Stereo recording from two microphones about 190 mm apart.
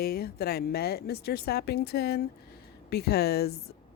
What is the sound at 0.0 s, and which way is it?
Speech, 55° left (ahead or behind).